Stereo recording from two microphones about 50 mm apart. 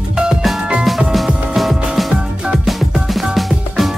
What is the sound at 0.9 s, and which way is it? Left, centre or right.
Music, centre.